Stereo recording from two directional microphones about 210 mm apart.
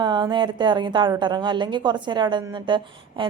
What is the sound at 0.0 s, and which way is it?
A woman's voice, 20° right (ahead or behind).